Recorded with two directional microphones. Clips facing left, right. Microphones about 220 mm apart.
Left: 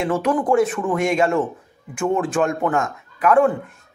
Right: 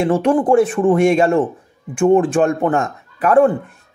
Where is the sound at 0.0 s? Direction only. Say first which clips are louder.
Right 5 dB; 30° right (ahead or behind).